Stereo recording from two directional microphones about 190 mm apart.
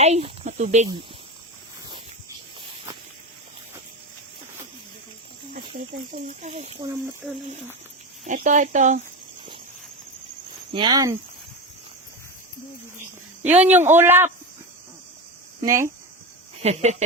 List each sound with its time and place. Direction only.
0.0 s speech: 35° right (ahead or behind)
6.2 s speech: 40° right (ahead or behind)
6.9 s a man's voice: 10° right (ahead or behind)
8.2 s speech: 40° right (ahead or behind)
10.7 s speech: 25° right (ahead or behind)
13.4 s a man's voice: 10° right (ahead or behind)
15.6 s a man's voice: 15° right (ahead or behind)
16.6 s speech: 35° right (ahead or behind)